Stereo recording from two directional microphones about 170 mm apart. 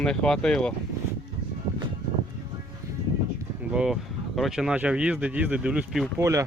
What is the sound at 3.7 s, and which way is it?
Speech, 5° right (ahead or behind).